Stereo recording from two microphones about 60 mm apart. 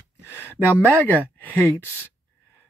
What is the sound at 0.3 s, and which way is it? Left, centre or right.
Speech, left.